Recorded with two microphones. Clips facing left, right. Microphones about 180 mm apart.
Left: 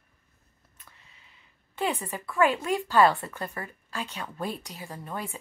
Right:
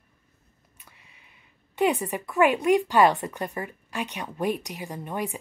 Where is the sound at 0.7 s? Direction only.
15° right (ahead or behind).